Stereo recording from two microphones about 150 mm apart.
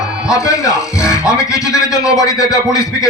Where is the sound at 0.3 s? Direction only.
20° left (ahead or behind).